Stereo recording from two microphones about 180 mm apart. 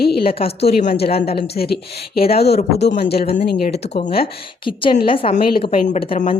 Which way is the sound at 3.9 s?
30° left (ahead or behind).